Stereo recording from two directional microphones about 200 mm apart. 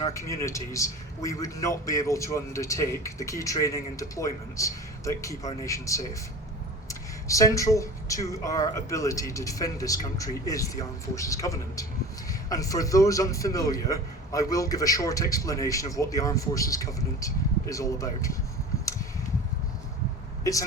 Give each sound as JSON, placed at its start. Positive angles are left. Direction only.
{"t": 0.0, "sound": "a man's voice", "side_deg": 15}
{"t": 20.4, "sound": "speech", "side_deg": 15}